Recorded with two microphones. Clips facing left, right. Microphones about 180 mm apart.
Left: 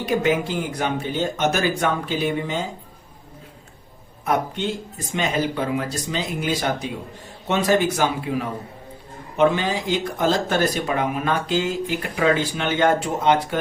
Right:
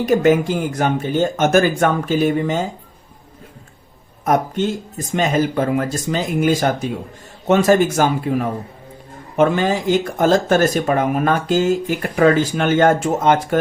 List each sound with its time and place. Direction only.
0.0 s speech: 45° right (ahead or behind)
4.3 s speech: 45° right (ahead or behind)